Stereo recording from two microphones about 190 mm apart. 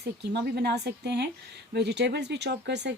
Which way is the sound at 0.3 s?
60° right (ahead or behind).